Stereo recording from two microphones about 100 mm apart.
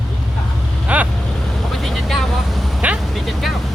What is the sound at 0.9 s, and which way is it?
Speech, 15° right (ahead or behind).